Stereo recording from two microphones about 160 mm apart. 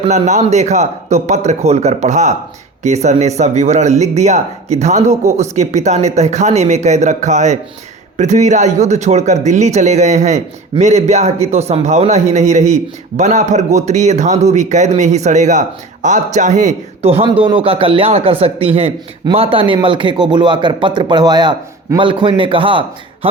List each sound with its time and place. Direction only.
0.1 s speech: 45° right (ahead or behind)